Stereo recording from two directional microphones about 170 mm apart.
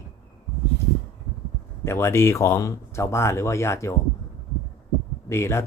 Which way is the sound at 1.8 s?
15° left (ahead or behind).